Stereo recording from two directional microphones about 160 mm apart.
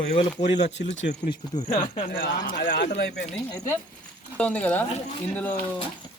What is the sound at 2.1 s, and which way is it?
Speech, 75° left (ahead or behind).